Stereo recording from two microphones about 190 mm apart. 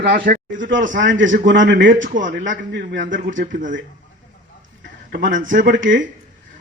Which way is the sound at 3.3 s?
45° right (ahead or behind).